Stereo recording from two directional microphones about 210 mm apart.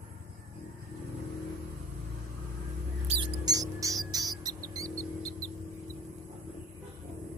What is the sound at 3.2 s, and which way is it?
Music, 15° right (ahead or behind).